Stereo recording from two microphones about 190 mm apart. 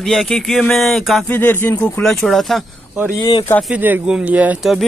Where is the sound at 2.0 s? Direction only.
Centre (ahead or behind).